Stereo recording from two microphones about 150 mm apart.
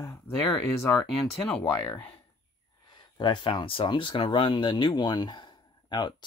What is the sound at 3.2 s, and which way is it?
Speech, 30° left (ahead or behind).